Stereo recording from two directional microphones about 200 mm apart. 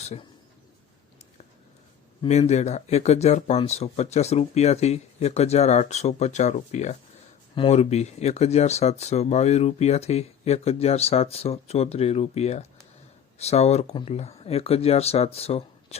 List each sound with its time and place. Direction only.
0.0 s speech: 30° left (ahead or behind)
2.2 s speech: 35° left (ahead or behind)